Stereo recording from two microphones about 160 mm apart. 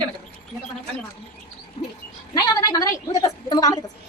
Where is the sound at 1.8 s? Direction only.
40° left (ahead or behind).